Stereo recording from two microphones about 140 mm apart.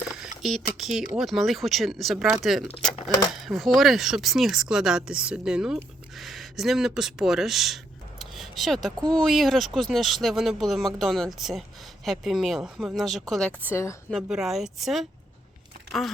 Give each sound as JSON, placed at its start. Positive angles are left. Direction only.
{"t": 0.1, "sound": "a sound", "side_deg": 0}
{"t": 0.8, "sound": "a woman's voice", "side_deg": 0}
{"t": 8.2, "sound": "a sound", "side_deg": 0}
{"t": 9.0, "sound": "a woman's voice", "side_deg": 5}
{"t": 13.7, "sound": "a woman's voice", "side_deg": 20}
{"t": 14.1, "sound": "a woman's voice", "side_deg": 0}